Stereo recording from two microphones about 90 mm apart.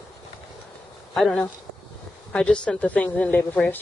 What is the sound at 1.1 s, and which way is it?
A woman's voice, 5° left (ahead or behind).